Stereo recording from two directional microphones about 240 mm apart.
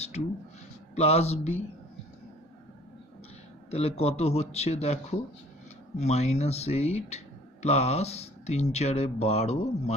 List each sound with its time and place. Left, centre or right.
0.9 s speech: left
3.7 s speech: left